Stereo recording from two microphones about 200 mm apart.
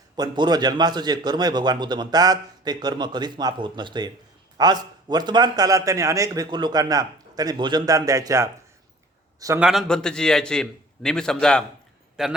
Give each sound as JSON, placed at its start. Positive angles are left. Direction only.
{"t": 0.2, "sound": "a man's voice", "side_deg": -20}
{"t": 9.6, "sound": "a man's voice", "side_deg": 0}